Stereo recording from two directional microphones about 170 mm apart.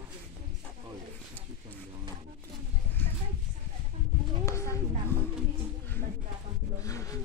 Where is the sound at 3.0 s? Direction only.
10° left (ahead or behind).